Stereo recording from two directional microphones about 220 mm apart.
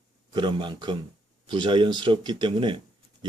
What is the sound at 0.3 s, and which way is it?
Speech, 20° right (ahead or behind).